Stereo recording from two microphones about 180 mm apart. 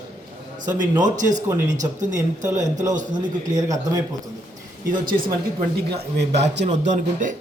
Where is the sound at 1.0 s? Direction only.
45° right (ahead or behind).